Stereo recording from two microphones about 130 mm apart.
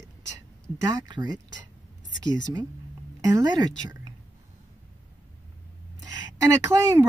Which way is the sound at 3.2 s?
25° right (ahead or behind).